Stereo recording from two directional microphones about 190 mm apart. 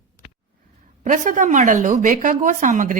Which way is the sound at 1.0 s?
45° right (ahead or behind).